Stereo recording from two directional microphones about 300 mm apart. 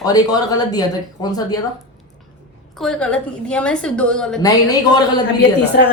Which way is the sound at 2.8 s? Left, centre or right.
Centre.